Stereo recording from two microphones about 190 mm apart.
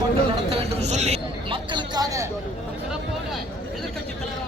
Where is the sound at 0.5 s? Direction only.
35° right (ahead or behind); by 2.2 s 20° right (ahead or behind).